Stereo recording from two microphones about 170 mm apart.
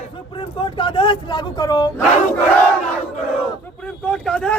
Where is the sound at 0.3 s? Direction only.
30° left (ahead or behind).